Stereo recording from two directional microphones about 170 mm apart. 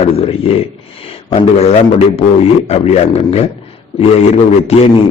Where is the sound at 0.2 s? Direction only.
35° left (ahead or behind).